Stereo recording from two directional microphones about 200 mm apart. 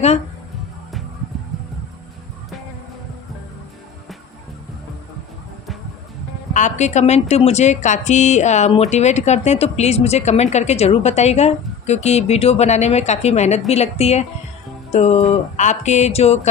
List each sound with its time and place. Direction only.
6.5 s speech: 35° left (ahead or behind)